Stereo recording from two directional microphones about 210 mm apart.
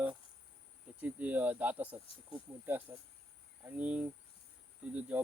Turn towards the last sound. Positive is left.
turn(degrees=-5)  # may be behind; listen again after turning